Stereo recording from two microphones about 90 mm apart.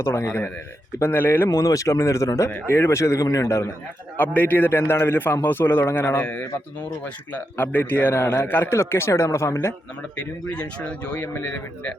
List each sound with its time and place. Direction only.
0.0 s a man's voice: 30° left (ahead or behind)
4.2 s a man's voice: 20° left (ahead or behind)
10.8 s a man's voice: 15° left (ahead or behind)